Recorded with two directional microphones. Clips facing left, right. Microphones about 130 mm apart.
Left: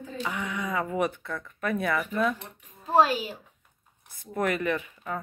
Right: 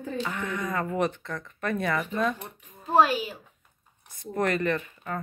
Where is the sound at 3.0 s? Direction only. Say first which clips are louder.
Even; 35° left (ahead or behind).